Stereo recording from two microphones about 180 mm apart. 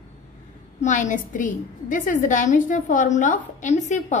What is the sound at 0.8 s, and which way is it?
A woman's voice, 45° left (ahead or behind).